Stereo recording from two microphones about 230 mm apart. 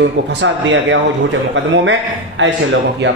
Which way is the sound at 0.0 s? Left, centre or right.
Right.